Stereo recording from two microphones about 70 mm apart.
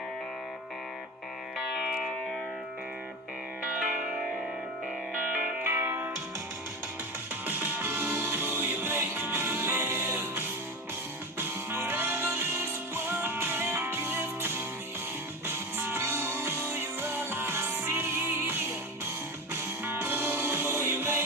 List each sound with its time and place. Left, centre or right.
5.1 s music: right
5.7 s music: right
7.4 s music: right